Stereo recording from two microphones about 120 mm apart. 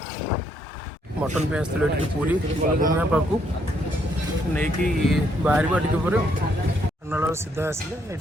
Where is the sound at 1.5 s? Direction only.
10° right (ahead or behind).